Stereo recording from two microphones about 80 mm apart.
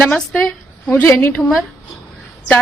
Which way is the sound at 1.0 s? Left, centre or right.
Left.